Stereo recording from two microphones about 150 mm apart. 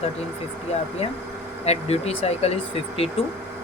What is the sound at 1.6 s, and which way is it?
Speech, 45° left (ahead or behind).